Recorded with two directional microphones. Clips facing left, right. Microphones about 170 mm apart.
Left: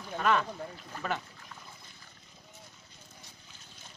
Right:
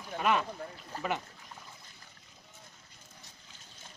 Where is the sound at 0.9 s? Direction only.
35° right (ahead or behind).